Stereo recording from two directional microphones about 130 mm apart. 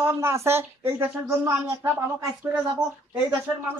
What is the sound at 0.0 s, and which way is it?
Speech, 20° right (ahead or behind).